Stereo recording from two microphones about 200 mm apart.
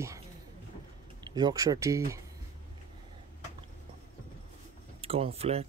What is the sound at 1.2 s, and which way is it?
Speech, 20° right (ahead or behind).